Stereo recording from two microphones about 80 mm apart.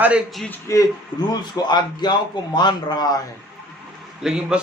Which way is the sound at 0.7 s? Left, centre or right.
Left.